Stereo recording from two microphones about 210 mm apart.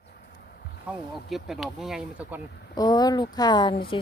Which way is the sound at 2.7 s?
20° left (ahead or behind).